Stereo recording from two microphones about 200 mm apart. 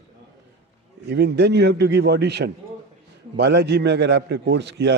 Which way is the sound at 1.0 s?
55° right (ahead or behind).